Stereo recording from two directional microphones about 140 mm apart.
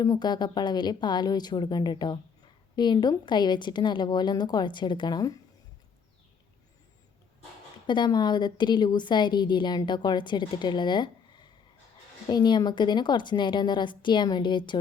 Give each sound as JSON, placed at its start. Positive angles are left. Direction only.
{"t": 0.0, "sound": "a woman's voice", "side_deg": 25}
{"t": 7.9, "sound": "a woman's voice", "side_deg": 30}